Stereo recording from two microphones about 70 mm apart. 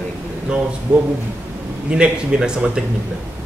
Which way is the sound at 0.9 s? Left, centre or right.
Centre.